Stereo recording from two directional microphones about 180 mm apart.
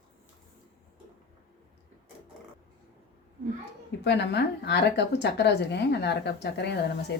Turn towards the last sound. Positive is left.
turn(degrees=70)  # may be behind; listen again after turning